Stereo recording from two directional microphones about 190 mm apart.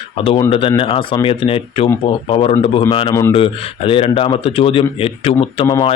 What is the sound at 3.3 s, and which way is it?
Speech, 30° left (ahead or behind).